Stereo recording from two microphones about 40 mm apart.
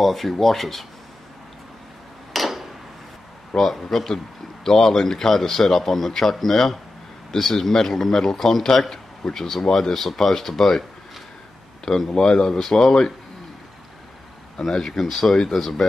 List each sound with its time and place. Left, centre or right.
0.0 s speech: centre
2.3 s a sound: centre
3.5 s speech: centre
11.8 s speech: centre
14.6 s speech: centre